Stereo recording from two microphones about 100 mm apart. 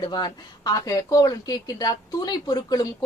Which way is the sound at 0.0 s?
45° left (ahead or behind).